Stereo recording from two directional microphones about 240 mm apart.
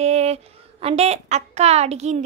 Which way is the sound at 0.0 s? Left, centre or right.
Right.